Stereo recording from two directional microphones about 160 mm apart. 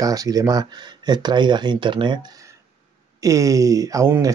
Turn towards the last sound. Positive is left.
turn(degrees=-20)  # may be behind; listen again after turning